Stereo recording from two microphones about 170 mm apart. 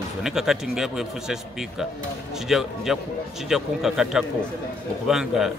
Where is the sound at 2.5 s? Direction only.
Centre (ahead or behind).